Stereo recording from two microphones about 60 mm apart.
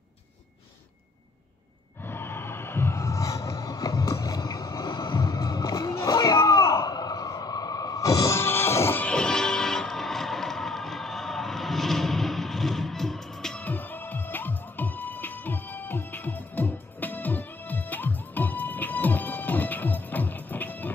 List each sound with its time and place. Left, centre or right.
2.0 s a sound: left
8.4 s music: left
9.0 s music: centre
13.6 s music: left